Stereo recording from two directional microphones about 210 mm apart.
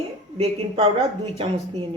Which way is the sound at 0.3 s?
25° right (ahead or behind).